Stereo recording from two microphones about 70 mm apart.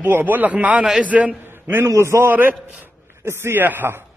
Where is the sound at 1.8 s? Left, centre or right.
Right.